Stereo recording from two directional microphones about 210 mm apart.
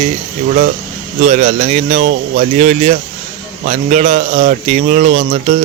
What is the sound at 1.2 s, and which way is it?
Speech, 35° right (ahead or behind).